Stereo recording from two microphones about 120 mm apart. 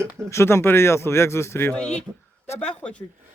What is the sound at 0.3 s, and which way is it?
Speech, 20° left (ahead or behind).